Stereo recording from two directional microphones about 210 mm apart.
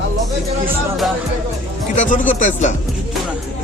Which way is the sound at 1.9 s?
35° left (ahead or behind).